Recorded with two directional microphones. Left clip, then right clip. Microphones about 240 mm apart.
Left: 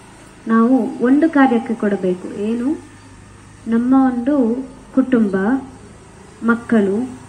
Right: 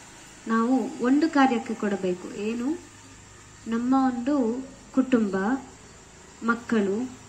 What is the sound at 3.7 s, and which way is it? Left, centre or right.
A woman's voice, right.